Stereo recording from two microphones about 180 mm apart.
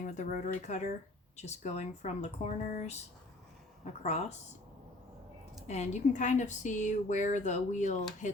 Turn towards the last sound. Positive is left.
turn(degrees=45)  # may be behind; listen again after turning